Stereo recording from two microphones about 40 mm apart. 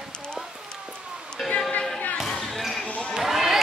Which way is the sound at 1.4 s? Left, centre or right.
Centre.